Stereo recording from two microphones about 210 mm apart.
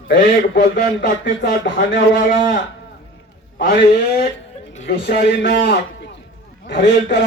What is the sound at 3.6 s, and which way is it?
Speech, 60° left (ahead or behind).